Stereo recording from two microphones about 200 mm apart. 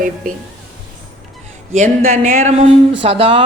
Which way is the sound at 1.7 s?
35° right (ahead or behind).